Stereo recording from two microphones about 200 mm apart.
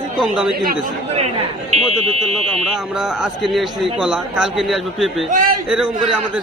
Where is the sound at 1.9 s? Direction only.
30° right (ahead or behind).